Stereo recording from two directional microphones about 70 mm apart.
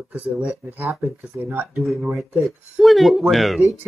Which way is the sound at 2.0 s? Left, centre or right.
Centre.